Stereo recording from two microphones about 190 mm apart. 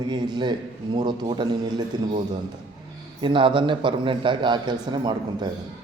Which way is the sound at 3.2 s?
25° right (ahead or behind).